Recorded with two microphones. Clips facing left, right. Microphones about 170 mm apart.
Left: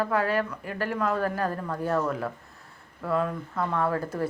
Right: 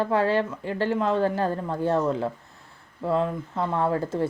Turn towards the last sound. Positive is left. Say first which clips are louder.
# right 3 dB
turn(degrees=-25)  # may be behind; listen again after turning